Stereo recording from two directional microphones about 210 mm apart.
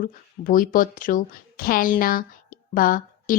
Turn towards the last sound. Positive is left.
turn(degrees=40)  # may be behind; listen again after turning